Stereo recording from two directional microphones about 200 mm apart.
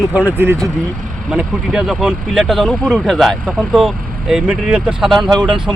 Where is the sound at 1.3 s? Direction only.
Centre (ahead or behind).